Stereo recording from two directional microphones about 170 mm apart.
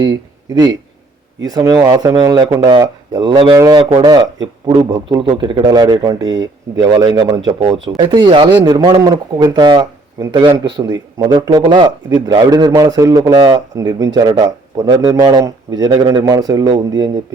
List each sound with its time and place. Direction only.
1.5 s a man's voice: 20° right (ahead or behind)